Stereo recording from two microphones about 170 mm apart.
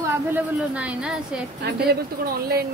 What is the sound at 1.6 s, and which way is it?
A woman's voice, 70° right (ahead or behind).